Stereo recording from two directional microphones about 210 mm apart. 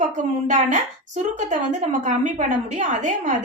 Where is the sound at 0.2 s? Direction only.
35° right (ahead or behind).